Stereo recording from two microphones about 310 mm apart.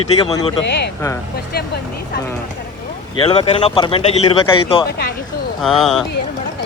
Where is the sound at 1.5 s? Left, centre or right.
Left.